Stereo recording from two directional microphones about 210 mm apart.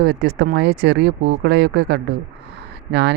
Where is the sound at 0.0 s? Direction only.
45° right (ahead or behind).